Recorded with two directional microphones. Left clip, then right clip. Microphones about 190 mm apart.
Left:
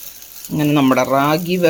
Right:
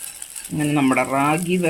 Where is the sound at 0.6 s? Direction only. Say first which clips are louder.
Left 4 dB; 30° left (ahead or behind).